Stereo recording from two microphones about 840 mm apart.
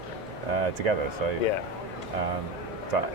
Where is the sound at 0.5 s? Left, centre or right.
Right.